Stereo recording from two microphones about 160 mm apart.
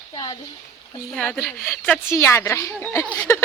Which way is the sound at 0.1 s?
25° left (ahead or behind).